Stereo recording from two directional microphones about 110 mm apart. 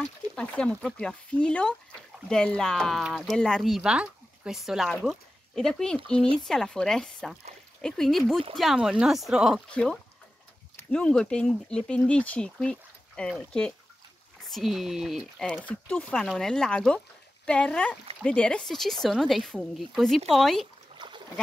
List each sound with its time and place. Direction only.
0.4 s speech: 10° left (ahead or behind)
9.7 s speech: 10° left (ahead or behind)
14.5 s speech: centre (ahead or behind)
15.6 s speech: 10° left (ahead or behind)
21.0 s a sound: 45° right (ahead or behind)